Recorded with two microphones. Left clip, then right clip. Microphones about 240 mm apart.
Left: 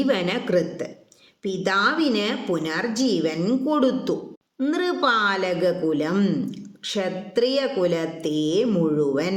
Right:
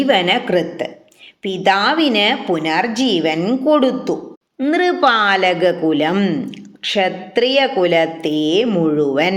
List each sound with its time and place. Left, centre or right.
0.0 s a woman's voice: centre